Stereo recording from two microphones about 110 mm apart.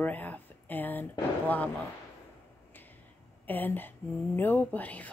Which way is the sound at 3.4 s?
15° left (ahead or behind).